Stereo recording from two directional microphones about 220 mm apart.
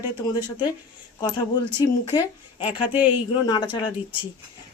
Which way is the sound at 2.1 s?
20° left (ahead or behind).